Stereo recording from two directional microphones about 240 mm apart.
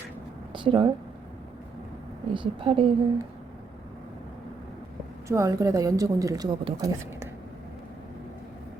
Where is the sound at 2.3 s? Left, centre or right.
Right.